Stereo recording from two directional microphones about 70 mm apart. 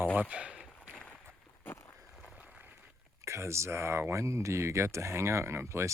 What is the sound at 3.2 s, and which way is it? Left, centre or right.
Speech, right.